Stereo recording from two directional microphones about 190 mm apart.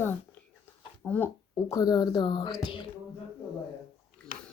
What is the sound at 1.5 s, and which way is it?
A woman's voice, 20° left (ahead or behind).